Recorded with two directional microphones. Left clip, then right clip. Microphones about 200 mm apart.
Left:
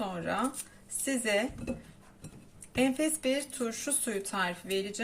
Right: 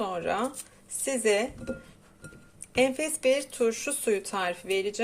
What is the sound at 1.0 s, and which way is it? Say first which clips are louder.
Speech: right 4 dB; 35° right (ahead or behind).